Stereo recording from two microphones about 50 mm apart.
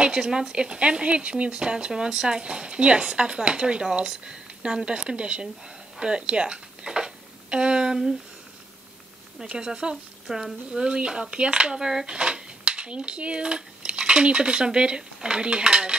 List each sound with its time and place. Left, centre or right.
0.0 s speech: centre
9.4 s speech: centre